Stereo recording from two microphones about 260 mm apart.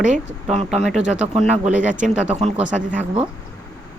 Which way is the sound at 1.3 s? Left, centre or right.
Right.